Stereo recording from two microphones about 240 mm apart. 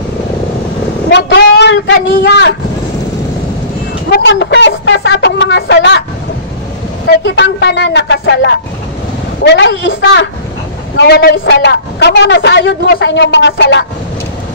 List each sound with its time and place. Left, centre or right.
1.1 s a sound: left
4.1 s a man's voice: left
7.1 s a man's voice: left